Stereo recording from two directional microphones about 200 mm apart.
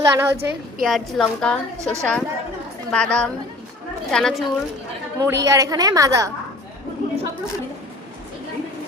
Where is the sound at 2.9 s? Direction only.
5° left (ahead or behind).